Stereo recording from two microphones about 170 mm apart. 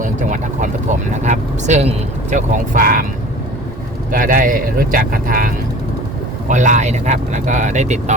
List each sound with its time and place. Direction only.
0.0 s a sound: 50° right (ahead or behind)
1.1 s speech: 45° right (ahead or behind)
4.1 s speech: 55° right (ahead or behind)